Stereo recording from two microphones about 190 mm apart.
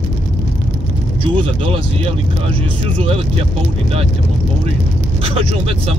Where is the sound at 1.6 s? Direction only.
30° right (ahead or behind).